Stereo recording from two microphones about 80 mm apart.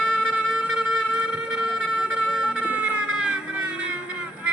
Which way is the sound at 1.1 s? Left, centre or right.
Centre.